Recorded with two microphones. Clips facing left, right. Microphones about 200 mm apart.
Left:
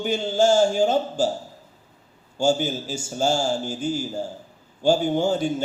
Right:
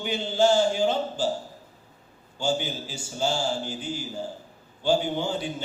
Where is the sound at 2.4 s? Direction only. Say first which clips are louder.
Left 6 dB; 45° left (ahead or behind).